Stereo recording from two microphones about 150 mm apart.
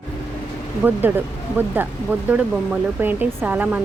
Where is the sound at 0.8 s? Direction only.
15° right (ahead or behind).